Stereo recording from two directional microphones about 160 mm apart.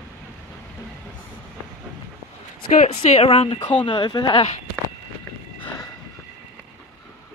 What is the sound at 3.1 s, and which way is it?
Speech, 35° left (ahead or behind).